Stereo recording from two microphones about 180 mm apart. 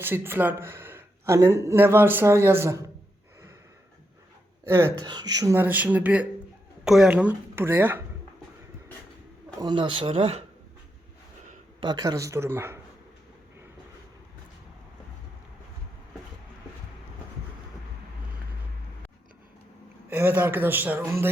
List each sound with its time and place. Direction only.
0.0 s speech: 10° right (ahead or behind)
4.6 s speech: 15° right (ahead or behind)
9.6 s speech: 25° right (ahead or behind)
11.8 s speech: 25° right (ahead or behind)
20.1 s speech: 10° right (ahead or behind)